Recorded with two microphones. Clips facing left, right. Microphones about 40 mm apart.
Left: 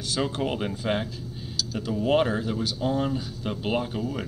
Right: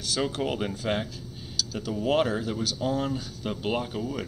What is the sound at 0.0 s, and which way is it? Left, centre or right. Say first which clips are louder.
Speech: left 1 dB; centre.